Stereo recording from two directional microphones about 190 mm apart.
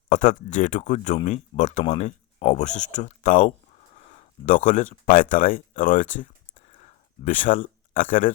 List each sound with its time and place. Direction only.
0.1 s speech: 45° left (ahead or behind)